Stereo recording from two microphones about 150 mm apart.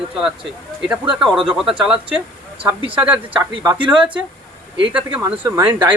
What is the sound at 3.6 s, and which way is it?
Speech, 25° right (ahead or behind).